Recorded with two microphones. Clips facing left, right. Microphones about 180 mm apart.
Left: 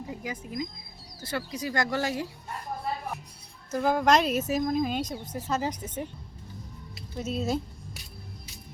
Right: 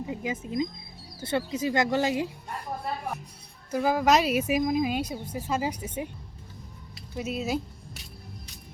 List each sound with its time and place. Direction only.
0.1 s speech: 20° right (ahead or behind)
3.7 s speech: 5° right (ahead or behind)
7.2 s speech: 10° right (ahead or behind)